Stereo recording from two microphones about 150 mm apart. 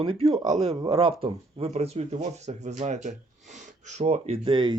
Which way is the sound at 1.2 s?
40° right (ahead or behind).